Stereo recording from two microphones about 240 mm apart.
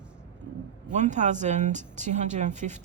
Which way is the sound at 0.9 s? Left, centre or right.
Right.